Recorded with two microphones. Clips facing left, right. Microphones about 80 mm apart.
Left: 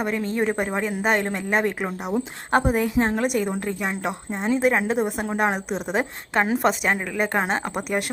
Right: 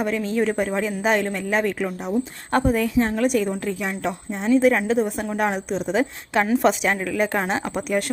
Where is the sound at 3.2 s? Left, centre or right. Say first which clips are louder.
Right 2 dB; centre.